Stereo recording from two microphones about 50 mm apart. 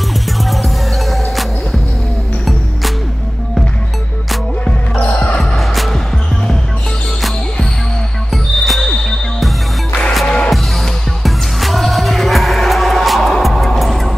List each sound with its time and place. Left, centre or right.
0.4 s music: centre
5.4 s music: centre
8.6 s music: centre
10.2 s music: centre
10.5 s music: centre